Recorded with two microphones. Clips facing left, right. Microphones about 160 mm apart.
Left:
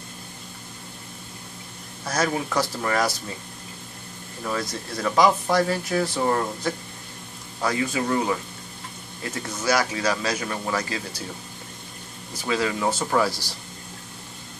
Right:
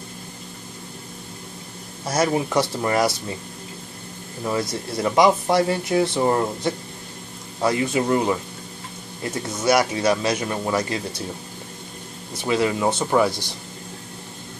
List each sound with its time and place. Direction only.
2.0 s speech: 25° right (ahead or behind)
4.9 s speech: 25° right (ahead or behind)
12.4 s speech: 25° right (ahead or behind)
13.1 s speech: 10° right (ahead or behind)